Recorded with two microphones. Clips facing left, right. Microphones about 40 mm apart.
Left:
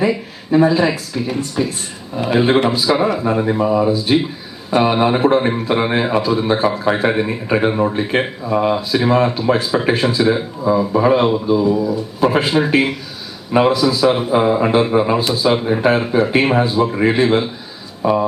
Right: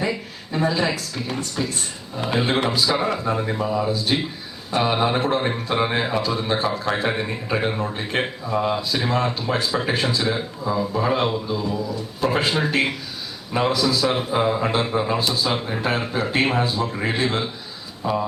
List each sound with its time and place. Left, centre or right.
0.0 s a man's voice: centre
3.9 s a man's voice: centre
18.0 s speech: left